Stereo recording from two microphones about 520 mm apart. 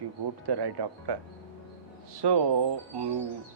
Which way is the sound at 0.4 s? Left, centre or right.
Right.